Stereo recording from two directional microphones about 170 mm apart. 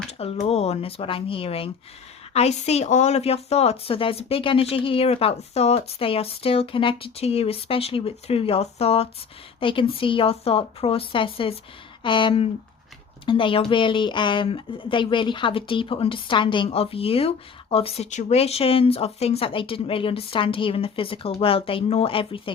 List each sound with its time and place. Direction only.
0.1 s speech: 35° left (ahead or behind)